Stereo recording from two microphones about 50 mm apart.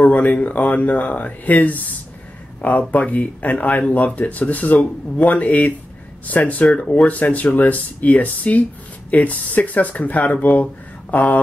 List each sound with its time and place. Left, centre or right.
0.0 s speech: left
2.9 s speech: left